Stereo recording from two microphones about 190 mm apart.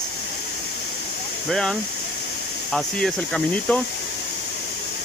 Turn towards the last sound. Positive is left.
turn(degrees=0)  # may be behind; listen again after turning